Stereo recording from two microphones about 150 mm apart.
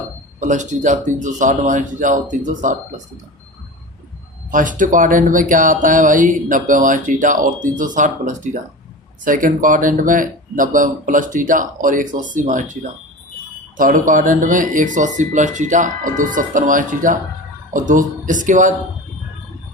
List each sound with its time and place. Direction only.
0.3 s speech: 55° right (ahead or behind)
4.5 s speech: 60° right (ahead or behind)
13.7 s speech: 60° right (ahead or behind)